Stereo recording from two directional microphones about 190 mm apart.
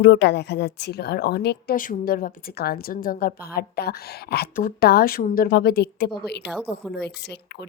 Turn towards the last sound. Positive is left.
turn(degrees=60)  # may be behind; listen again after turning